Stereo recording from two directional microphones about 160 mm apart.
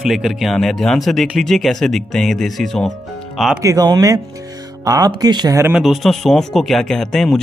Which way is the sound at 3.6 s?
25° right (ahead or behind).